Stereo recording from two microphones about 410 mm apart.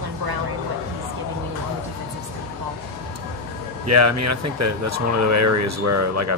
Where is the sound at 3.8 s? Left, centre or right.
Right.